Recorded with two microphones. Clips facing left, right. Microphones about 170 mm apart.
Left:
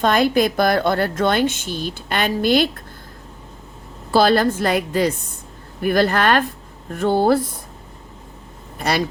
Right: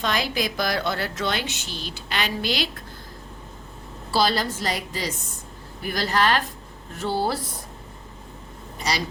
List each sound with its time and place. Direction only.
0.0 s a woman's voice: 50° left (ahead or behind)
4.1 s a woman's voice: 55° left (ahead or behind)
8.8 s a woman's voice: 55° left (ahead or behind)